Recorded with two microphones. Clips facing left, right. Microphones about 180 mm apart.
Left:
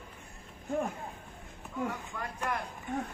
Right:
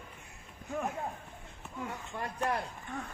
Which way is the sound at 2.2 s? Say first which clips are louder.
Right 4 dB; 35° right (ahead or behind).